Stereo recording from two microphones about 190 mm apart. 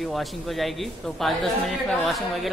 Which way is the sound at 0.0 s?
Centre (ahead or behind).